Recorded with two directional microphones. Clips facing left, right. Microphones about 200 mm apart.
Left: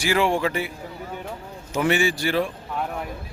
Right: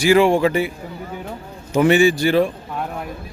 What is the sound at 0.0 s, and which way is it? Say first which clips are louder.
Speech: right 8 dB; 15° right (ahead or behind).